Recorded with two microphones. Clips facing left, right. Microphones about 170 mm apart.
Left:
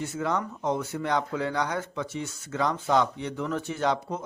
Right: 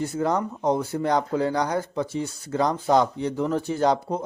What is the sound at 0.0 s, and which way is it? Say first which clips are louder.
Speech: right 5 dB; 35° right (ahead or behind).